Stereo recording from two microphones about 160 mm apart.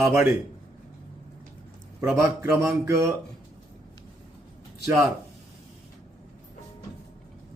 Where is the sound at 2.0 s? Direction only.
15° right (ahead or behind).